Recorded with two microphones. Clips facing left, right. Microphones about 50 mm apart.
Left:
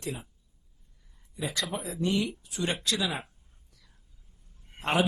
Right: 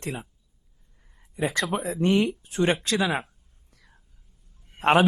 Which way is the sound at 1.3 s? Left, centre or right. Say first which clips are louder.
Right 7 dB; right.